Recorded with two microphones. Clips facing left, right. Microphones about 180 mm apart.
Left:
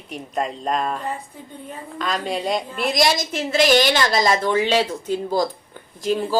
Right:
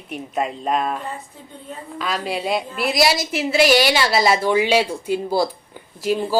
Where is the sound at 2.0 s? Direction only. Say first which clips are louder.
Even; 5° right (ahead or behind).